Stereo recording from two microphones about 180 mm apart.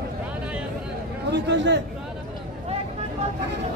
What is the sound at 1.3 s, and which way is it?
Speech, 75° right (ahead or behind).